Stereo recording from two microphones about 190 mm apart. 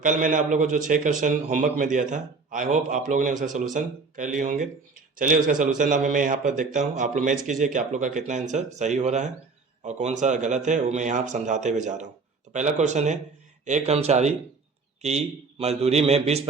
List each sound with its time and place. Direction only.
0.0 s a man's voice: 45° right (ahead or behind)